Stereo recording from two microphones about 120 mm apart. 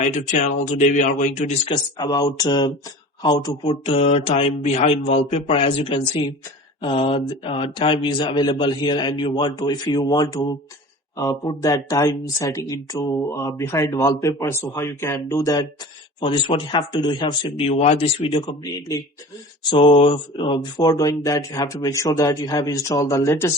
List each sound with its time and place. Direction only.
0.0 s speech: 85° left
1.7 s speech: 35° left (ahead or behind)
3.8 s a man's voice: 60° left (ahead or behind); by 19.0 s 35° left (ahead or behind)
19.7 s speech: 45° left (ahead or behind)
20.8 s speech: 30° left (ahead or behind)